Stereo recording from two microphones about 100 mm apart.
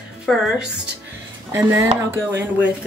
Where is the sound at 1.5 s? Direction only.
25° right (ahead or behind).